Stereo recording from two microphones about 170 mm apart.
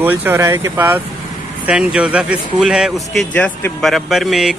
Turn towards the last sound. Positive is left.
turn(degrees=0)  # may be behind; listen again after turning